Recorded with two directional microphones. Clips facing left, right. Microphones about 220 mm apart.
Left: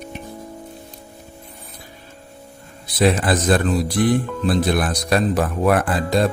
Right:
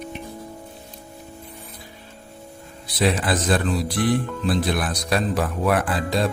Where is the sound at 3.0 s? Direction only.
50° left (ahead or behind).